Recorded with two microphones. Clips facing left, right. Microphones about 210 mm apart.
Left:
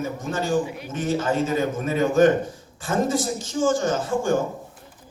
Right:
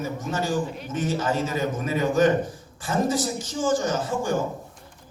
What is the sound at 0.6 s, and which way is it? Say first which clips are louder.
Speech: even; 10° left (ahead or behind).